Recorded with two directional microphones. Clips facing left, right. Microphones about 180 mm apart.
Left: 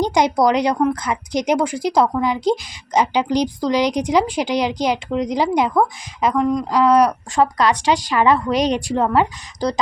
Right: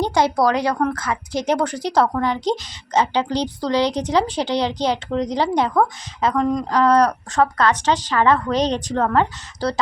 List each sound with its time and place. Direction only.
0.0 s a woman's voice: 15° left (ahead or behind)